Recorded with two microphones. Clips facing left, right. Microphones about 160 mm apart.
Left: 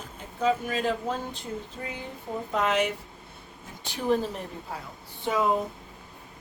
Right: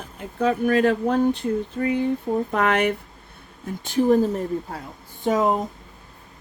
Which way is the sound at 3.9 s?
45° right (ahead or behind).